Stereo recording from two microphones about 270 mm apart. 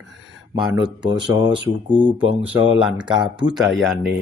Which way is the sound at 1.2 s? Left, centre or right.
Centre.